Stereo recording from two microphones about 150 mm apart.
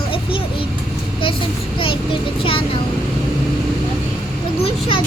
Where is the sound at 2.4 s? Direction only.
35° left (ahead or behind).